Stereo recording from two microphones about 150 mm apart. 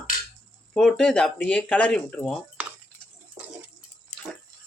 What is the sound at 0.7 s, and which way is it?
A woman's voice, 5° left (ahead or behind).